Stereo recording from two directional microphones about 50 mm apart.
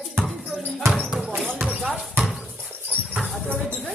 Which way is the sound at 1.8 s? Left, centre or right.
Centre.